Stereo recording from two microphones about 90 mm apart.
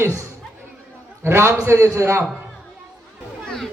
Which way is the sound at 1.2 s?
30° right (ahead or behind).